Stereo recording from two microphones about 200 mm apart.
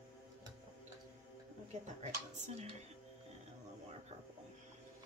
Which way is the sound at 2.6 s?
35° right (ahead or behind).